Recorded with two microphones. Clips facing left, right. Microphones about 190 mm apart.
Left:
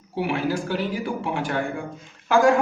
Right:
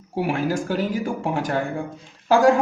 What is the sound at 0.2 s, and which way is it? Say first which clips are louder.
A man's voice: right 1 dB; 45° right (ahead or behind).